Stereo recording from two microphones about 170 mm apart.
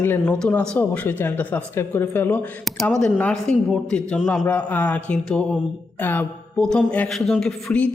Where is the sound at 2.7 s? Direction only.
Centre (ahead or behind).